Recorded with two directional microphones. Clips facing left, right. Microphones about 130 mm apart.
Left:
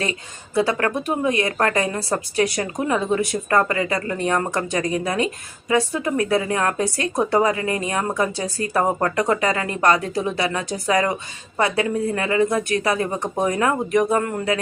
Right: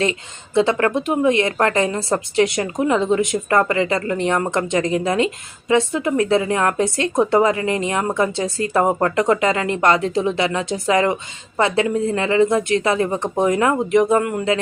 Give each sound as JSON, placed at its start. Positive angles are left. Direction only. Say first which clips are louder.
{"t": 0.5, "sound": "a woman's voice", "louder": "right 4 dB", "side_deg": -25}